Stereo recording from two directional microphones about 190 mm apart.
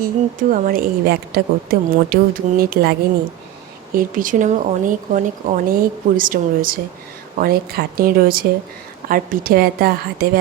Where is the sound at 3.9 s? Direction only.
45° right (ahead or behind).